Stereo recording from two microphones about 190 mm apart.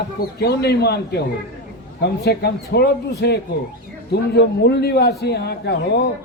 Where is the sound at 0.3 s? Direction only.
55° left (ahead or behind).